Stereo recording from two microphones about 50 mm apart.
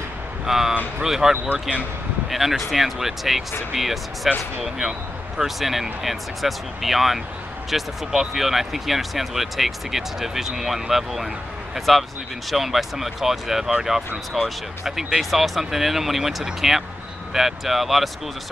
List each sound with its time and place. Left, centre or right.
0.5 s speech: centre
1.3 s speech: right
2.3 s speech: centre